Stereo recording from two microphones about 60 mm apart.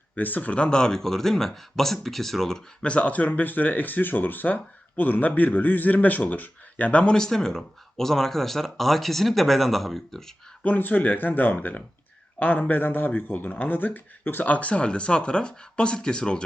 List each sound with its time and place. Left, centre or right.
0.2 s speech: left; by 2.6 s centre
2.8 s speech: centre
10.6 s speech: left